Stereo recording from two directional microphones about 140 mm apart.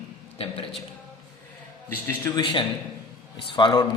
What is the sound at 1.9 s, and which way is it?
Speech, 15° left (ahead or behind).